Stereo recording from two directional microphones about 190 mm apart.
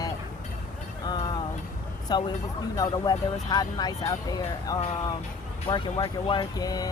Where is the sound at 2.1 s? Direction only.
20° left (ahead or behind).